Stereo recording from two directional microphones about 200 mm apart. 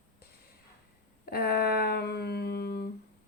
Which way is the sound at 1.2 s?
50° left (ahead or behind).